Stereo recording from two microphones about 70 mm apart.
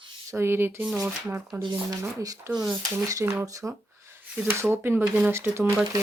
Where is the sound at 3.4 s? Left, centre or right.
Right.